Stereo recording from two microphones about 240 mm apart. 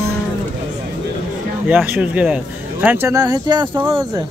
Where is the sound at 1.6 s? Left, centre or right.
Centre.